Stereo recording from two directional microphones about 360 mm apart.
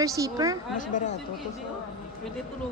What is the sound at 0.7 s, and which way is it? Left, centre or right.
Speech, left.